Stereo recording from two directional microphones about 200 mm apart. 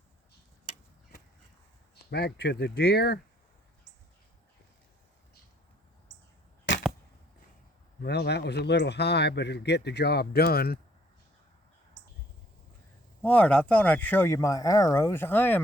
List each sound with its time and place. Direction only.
2.0 s speech: 50° left (ahead or behind)
8.0 s a man's voice: 55° left (ahead or behind)
13.2 s speech: 5° left (ahead or behind)